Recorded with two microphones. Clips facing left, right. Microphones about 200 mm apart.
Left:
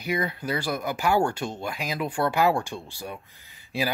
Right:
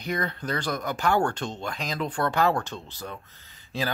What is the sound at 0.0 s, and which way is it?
Speech, 10° left (ahead or behind).